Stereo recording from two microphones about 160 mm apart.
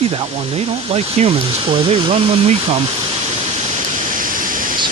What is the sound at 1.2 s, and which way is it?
Speech, 45° right (ahead or behind).